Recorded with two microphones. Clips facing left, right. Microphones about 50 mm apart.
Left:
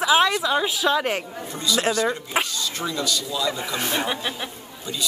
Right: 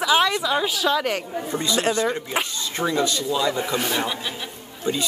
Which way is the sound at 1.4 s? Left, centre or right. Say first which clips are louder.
Right 1 dB; right.